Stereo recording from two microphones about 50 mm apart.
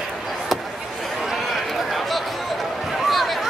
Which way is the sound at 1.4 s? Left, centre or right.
Centre.